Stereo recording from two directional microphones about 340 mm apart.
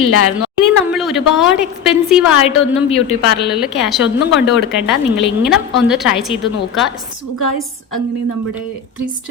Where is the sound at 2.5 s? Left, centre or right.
Left.